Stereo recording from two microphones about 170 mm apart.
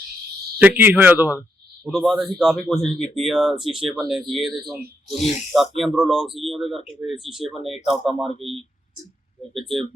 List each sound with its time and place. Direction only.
0.8 s speech: 10° right (ahead or behind)
5.0 s speech: 45° left (ahead or behind)
5.7 s speech: centre (ahead or behind)
9.6 s speech: centre (ahead or behind)